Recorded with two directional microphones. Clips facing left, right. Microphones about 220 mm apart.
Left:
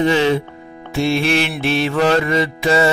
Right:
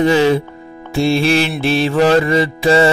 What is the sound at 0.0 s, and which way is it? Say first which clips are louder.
Mantra: right 3 dB; 35° right (ahead or behind).